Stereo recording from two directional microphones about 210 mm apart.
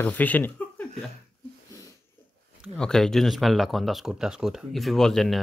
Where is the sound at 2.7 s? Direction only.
5° left (ahead or behind).